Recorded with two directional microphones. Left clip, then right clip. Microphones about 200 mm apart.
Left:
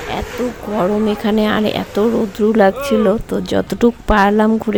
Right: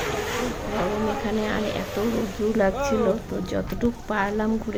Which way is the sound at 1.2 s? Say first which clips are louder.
Left 10 dB; 55° left (ahead or behind).